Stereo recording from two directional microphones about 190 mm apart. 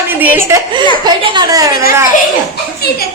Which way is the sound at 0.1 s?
10° right (ahead or behind).